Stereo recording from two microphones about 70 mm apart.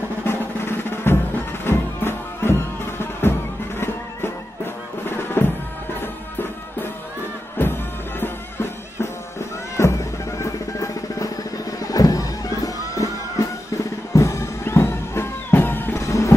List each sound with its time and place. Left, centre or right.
0.2 s music: left
7.5 s music: left
9.8 s music: left
16.0 s music: left